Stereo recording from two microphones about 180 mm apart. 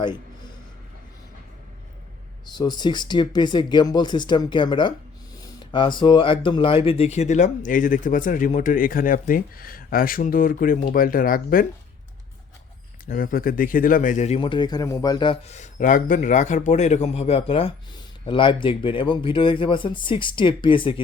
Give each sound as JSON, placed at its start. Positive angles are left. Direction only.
{"t": 0.0, "sound": "a sound", "side_deg": 25}
{"t": 2.6, "sound": "speech", "side_deg": 25}
{"t": 13.1, "sound": "a man's voice", "side_deg": 50}